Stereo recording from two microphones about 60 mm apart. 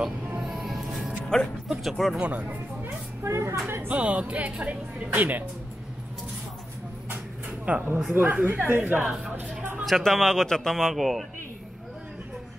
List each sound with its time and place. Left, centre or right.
0.4 s music: centre
1.3 s speech: centre
1.7 s speech: centre
2.1 s speech: right
2.8 s a sound: right
3.6 s speech: right
3.9 s speech: right
7.6 s speech: right
9.6 s a sound: right
9.8 s speech: centre